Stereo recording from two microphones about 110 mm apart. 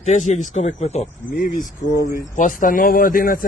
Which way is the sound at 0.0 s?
90° left.